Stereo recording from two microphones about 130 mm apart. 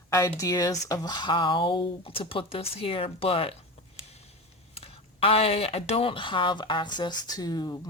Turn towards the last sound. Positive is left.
turn(degrees=30)  # may be behind; listen again after turning